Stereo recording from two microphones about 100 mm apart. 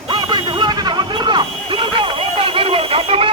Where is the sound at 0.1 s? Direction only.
50° right (ahead or behind).